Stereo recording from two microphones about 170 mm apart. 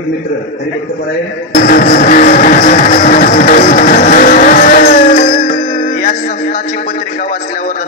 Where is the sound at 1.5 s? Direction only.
60° left (ahead or behind).